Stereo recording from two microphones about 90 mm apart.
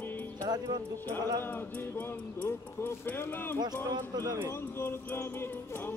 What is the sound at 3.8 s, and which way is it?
Speech, 45° right (ahead or behind).